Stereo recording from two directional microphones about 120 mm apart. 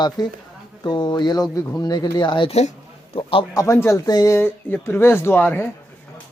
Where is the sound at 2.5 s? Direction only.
65° left (ahead or behind).